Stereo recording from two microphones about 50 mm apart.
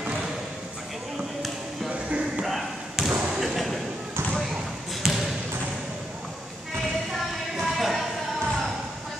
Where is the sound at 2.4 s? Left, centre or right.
Centre.